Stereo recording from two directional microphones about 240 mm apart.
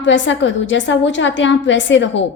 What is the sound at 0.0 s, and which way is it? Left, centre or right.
A woman's voice, left.